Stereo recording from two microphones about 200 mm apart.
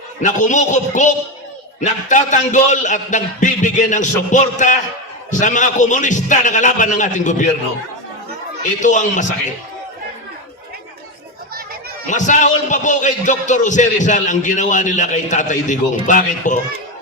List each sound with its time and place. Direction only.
0.2 s a man's voice: 40° left (ahead or behind)
8.8 s a man's voice: 40° left (ahead or behind)
12.0 s a man's voice: 40° left (ahead or behind)